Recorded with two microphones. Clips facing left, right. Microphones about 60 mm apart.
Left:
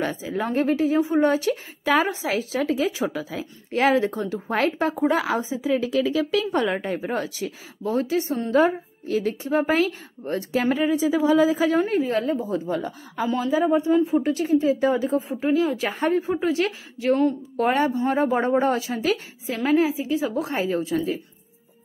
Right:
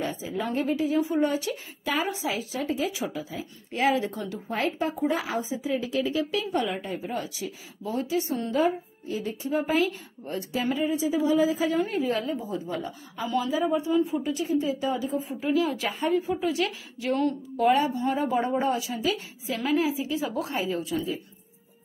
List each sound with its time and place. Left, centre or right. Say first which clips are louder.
0.2 s a woman's voice: left 5 dB; left
3.2 s speech: left 4 dB; left
4.5 s speech: left 5 dB; left
11.7 s a woman's voice: left 5 dB; left
12.4 s speech: left 6 dB; left
15.4 s a woman's voice: left 2 dB; left
15.9 s a woman's voice: left 3 dB; left
17.6 s a woman's voice: left 1 dB; left
20.5 s a woman's voice: left 5 dB; left